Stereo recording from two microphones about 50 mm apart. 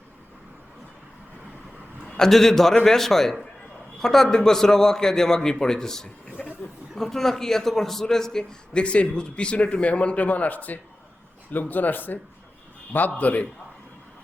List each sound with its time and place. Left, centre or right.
2.0 s a man's voice: centre; by 13.5 s left